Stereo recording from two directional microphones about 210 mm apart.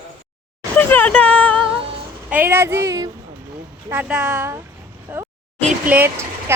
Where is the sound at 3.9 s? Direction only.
5° right (ahead or behind).